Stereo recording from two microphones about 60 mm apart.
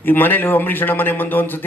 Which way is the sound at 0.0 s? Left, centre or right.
Left.